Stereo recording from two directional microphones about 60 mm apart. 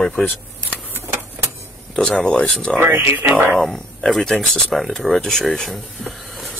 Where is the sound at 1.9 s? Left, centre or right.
Centre.